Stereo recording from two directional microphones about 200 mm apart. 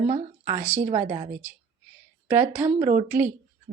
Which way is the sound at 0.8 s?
40° right (ahead or behind).